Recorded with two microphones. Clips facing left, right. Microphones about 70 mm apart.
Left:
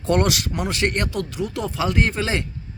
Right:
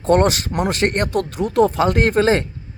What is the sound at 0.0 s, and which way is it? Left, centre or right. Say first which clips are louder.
Speech: right 5 dB; right.